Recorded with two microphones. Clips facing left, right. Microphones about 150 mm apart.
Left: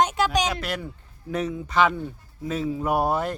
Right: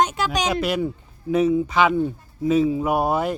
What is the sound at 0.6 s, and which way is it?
Speech, 10° right (ahead or behind).